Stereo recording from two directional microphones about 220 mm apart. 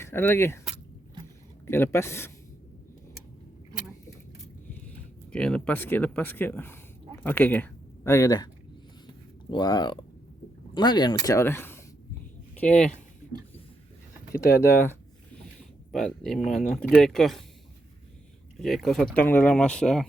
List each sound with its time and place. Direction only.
0.0 s speech: 10° left (ahead or behind)
1.6 s speech: 10° left (ahead or behind)
4.9 s speech: 5° left (ahead or behind)
9.5 s speech: 20° left (ahead or behind)
14.5 s speech: 10° left (ahead or behind)
18.6 s speech: centre (ahead or behind)